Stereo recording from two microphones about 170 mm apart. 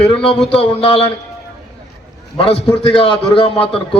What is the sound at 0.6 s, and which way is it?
Speech, 30° left (ahead or behind).